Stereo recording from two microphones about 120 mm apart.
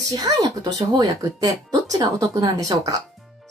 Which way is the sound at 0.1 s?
30° right (ahead or behind).